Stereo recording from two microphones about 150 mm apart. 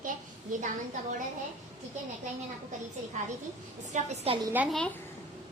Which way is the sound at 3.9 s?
40° right (ahead or behind).